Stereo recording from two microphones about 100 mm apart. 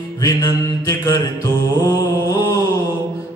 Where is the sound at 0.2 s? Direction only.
35° left (ahead or behind).